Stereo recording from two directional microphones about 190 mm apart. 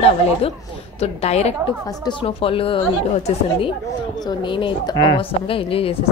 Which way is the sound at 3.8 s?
20° left (ahead or behind).